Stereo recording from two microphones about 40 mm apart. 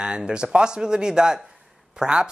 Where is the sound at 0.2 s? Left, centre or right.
Right.